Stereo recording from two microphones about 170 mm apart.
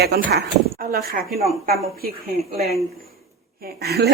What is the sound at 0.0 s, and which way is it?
Speech, 70° right (ahead or behind).